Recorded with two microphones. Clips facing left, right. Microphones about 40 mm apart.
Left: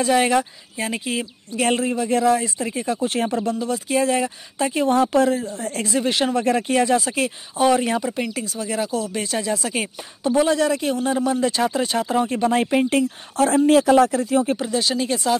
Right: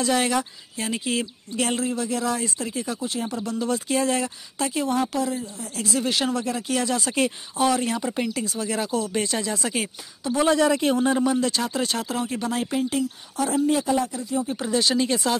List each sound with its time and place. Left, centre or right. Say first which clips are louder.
0.0 s speech: left 5 dB; centre
1.8 s speech: left 5 dB; left
3.5 s speech: left 2 dB; centre
4.2 s speech: left 4 dB; left
4.9 s speech: left 7 dB; left
5.9 s speech: left 4 dB; left
7.2 s speech: left 1 dB; centre
11.3 s speech: left 4 dB; centre
12.3 s speech: left 7 dB; left
12.7 s speech: left 6 dB; left
14.6 s speech: even; centre